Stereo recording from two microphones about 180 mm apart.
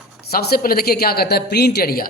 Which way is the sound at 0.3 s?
60° left (ahead or behind).